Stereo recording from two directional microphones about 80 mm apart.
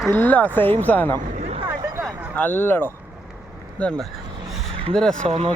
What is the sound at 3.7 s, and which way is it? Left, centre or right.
Speech, centre.